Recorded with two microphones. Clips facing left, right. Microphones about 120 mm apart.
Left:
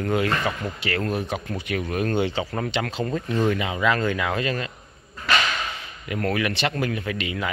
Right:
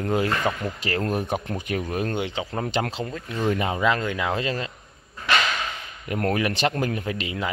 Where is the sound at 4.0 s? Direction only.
15° right (ahead or behind).